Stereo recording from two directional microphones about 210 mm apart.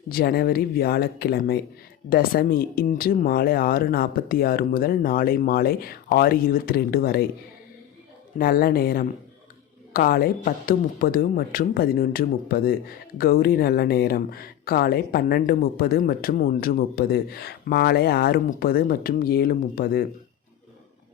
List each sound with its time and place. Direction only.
0.1 s speech: 45° left (ahead or behind)
8.4 s speech: 45° left (ahead or behind)